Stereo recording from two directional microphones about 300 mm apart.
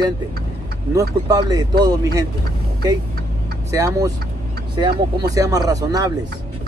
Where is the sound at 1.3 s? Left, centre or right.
Centre.